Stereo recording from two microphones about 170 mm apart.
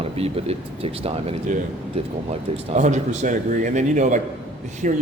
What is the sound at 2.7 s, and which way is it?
A man's voice, 45° right (ahead or behind).